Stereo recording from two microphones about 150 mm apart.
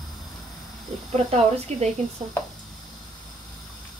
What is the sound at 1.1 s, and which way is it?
Speech, 45° right (ahead or behind).